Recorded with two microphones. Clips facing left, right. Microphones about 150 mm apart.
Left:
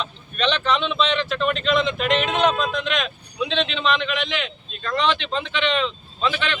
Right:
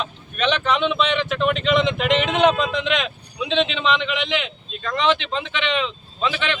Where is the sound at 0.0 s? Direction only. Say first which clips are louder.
Right 1 dB; 10° right (ahead or behind).